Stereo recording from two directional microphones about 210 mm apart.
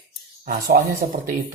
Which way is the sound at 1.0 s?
20° right (ahead or behind).